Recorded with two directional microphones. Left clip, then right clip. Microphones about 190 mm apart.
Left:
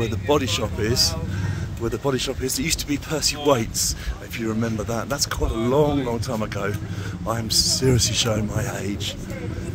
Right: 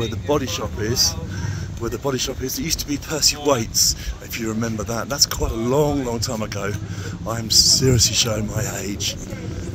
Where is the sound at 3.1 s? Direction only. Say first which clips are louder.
Right 2 dB; 15° right (ahead or behind).